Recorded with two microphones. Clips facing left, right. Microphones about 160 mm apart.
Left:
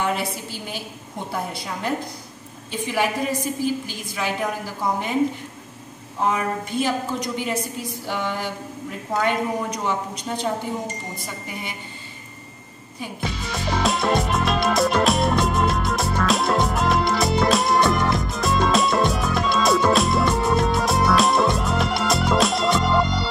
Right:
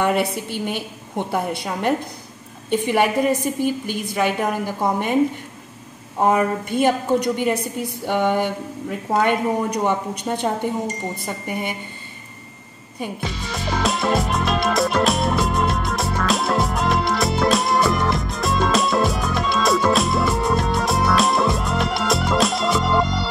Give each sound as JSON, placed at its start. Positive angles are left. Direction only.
{"t": 0.0, "sound": "a woman's voice", "side_deg": -60}
{"t": 6.2, "sound": "a woman's voice", "side_deg": -55}
{"t": 13.2, "sound": "music", "side_deg": 0}